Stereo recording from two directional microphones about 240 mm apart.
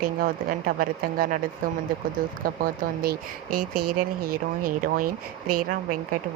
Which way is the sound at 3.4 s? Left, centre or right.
Right.